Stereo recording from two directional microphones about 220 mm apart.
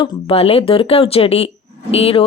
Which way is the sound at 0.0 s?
25° left (ahead or behind).